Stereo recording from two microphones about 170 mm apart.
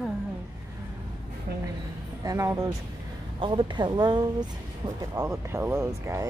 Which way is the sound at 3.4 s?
30° right (ahead or behind).